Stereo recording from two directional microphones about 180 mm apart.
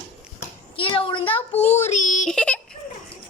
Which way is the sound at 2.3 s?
5° left (ahead or behind).